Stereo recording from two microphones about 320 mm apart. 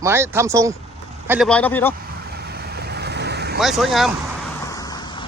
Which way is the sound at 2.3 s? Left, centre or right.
Right.